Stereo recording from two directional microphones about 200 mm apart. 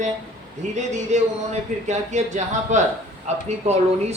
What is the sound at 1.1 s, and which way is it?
Speech, 35° right (ahead or behind).